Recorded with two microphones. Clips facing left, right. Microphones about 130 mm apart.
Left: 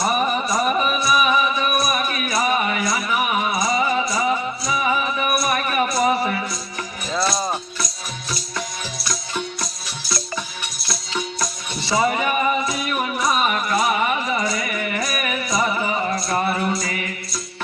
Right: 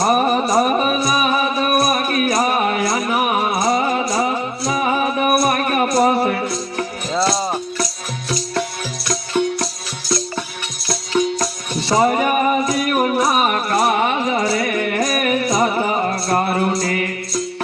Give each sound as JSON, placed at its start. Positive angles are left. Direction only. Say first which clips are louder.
{"t": 0.0, "sound": "music", "louder": "right 5 dB", "side_deg": -50}
{"t": 11.9, "sound": "music", "louder": "right 4 dB", "side_deg": -45}